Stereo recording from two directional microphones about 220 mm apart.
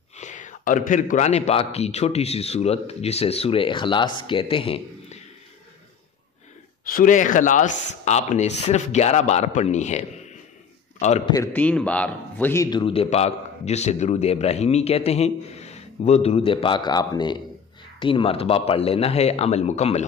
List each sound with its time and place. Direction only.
0.1 s a man's voice: 35° left (ahead or behind)
6.8 s speech: 40° left (ahead or behind)
11.3 s a man's voice: 5° left (ahead or behind); by 20.1 s 30° left (ahead or behind)